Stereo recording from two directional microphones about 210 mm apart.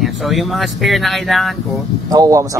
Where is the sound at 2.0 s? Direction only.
15° right (ahead or behind).